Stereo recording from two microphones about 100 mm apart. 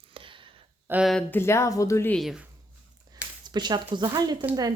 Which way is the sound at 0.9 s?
20° right (ahead or behind).